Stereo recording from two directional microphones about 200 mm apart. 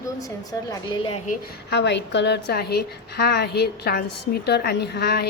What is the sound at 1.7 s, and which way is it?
A woman's voice, 60° left (ahead or behind).